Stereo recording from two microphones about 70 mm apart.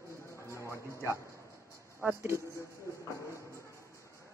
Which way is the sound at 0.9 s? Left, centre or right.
Right.